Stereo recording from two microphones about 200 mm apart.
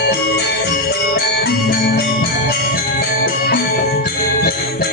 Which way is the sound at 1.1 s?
50° left (ahead or behind).